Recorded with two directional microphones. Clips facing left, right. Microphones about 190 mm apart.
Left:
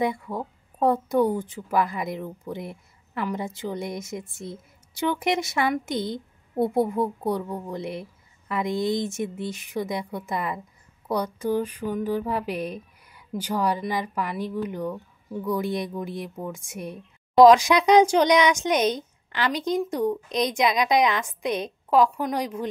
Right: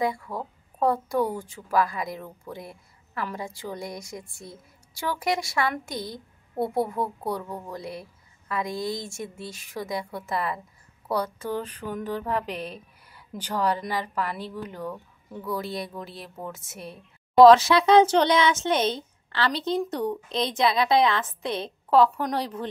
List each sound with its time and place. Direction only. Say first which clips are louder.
0.0 s speech: left 2 dB; 20° left (ahead or behind)